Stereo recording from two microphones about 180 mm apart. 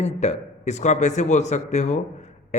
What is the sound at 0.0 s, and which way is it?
A man's voice, 40° left (ahead or behind).